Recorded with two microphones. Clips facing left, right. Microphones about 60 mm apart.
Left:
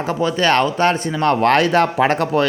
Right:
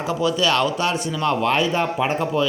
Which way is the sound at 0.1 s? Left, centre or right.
Left.